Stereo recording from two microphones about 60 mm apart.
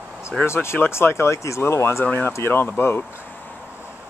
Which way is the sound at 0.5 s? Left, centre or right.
Left.